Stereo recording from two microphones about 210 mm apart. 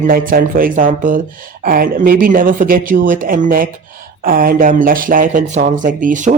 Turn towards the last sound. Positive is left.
turn(degrees=-40)  # may be behind; listen again after turning